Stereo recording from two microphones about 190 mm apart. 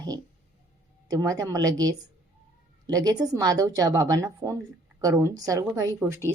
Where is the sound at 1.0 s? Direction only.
20° right (ahead or behind).